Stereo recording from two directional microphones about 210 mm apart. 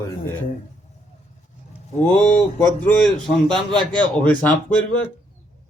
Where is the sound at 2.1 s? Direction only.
5° left (ahead or behind).